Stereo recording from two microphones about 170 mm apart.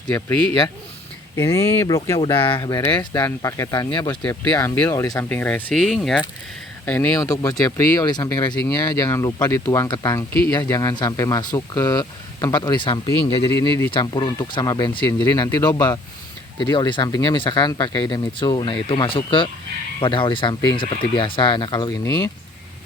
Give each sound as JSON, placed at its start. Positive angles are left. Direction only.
{"t": 0.1, "sound": "speech", "side_deg": 10}
{"t": 2.4, "sound": "speech", "side_deg": 25}